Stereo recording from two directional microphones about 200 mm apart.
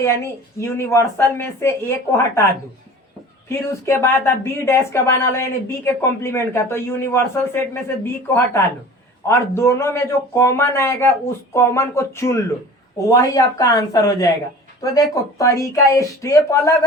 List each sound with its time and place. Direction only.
0.0 s speech: 15° left (ahead or behind)
3.8 s speech: 10° left (ahead or behind)